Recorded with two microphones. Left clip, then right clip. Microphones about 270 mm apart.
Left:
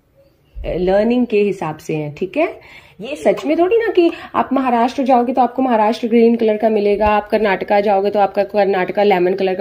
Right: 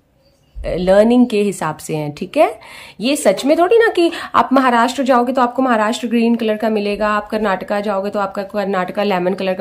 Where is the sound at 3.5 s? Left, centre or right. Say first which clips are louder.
Right 4 dB; right.